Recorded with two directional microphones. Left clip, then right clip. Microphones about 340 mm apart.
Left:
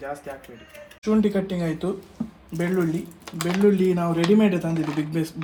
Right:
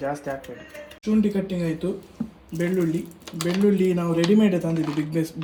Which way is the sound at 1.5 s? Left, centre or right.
Centre.